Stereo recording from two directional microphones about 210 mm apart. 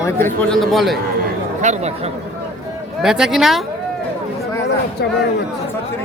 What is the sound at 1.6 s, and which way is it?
Speech, 35° right (ahead or behind).